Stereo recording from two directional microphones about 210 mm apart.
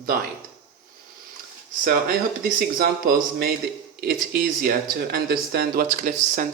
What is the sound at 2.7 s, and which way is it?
Speech, 45° right (ahead or behind).